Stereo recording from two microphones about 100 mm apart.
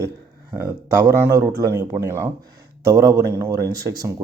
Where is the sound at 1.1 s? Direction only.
25° right (ahead or behind).